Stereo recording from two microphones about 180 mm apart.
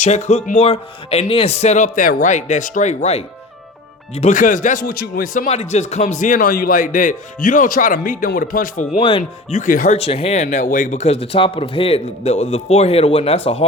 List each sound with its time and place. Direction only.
0.0 s a man's voice: 40° left (ahead or behind)
5.5 s a man's voice: 35° left (ahead or behind)
9.0 s speech: 30° left (ahead or behind)
9.6 s a man's voice: 45° left (ahead or behind)
10.0 s speech: 35° left (ahead or behind)